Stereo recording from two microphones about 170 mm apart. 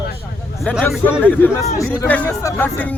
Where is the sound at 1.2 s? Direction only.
15° left (ahead or behind).